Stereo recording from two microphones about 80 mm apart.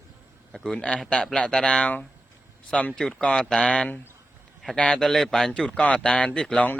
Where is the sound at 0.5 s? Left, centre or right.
Centre.